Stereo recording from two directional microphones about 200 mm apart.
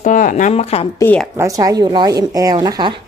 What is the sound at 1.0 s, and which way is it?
Speech, 10° left (ahead or behind).